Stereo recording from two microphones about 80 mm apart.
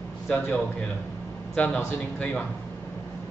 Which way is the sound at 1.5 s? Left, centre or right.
Centre.